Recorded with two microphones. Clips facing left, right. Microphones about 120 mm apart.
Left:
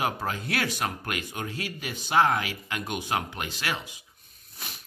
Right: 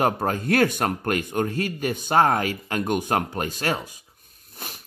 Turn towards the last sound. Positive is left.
turn(degrees=-45)  # may be behind; listen again after turning